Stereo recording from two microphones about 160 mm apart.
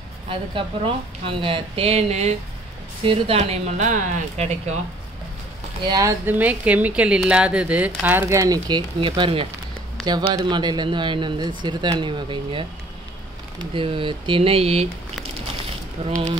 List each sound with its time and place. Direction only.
0.3 s a woman's voice: 35° right (ahead or behind)
5.9 s a woman's voice: 20° right (ahead or behind)
13.7 s a woman's voice: 30° right (ahead or behind)